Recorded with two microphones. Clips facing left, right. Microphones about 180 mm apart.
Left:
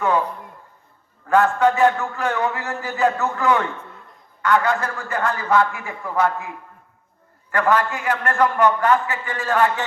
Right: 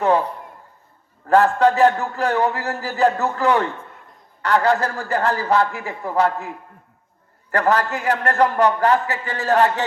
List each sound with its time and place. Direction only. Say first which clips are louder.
0.0 s a man's voice: right 2 dB; 35° right (ahead or behind)
1.3 s a man's voice: right 2 dB; 35° right (ahead or behind)
7.5 s a man's voice: right 1 dB; 40° right (ahead or behind)